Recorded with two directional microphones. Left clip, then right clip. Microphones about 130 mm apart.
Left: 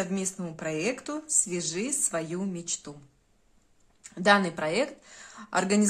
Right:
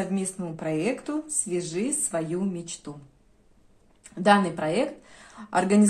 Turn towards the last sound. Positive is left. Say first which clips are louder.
# right 4 dB
turn(degrees=30)  # may be behind; listen again after turning